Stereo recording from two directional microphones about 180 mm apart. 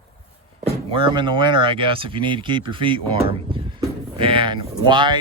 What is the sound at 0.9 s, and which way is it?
Speech, 25° right (ahead or behind).